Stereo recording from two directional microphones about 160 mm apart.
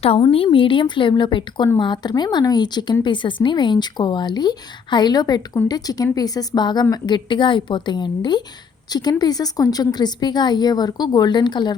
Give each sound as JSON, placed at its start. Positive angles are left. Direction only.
{"t": 0.0, "sound": "a woman's voice", "side_deg": 35}